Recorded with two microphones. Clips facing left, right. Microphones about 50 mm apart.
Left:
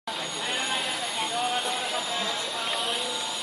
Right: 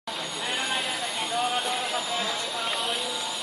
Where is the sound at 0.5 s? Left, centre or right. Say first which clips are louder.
Right 1 dB; centre.